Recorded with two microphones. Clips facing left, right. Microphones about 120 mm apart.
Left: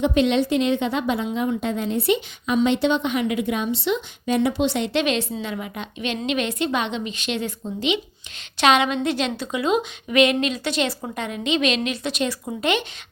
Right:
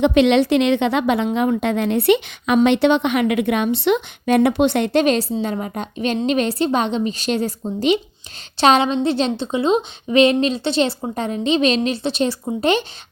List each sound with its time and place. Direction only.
0.0 s a woman's voice: 80° right; by 12.8 s 30° right (ahead or behind)